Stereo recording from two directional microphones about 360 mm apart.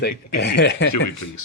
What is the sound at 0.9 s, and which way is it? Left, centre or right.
Speech, left.